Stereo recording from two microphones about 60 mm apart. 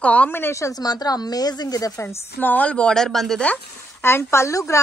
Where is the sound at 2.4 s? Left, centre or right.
Left.